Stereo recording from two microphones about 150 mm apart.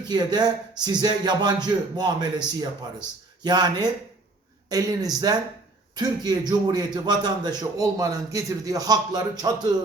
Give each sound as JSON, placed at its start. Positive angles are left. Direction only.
{"t": 0.1, "sound": "a man's voice", "side_deg": -30}